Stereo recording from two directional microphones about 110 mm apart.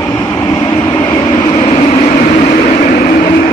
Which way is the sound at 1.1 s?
45° left (ahead or behind).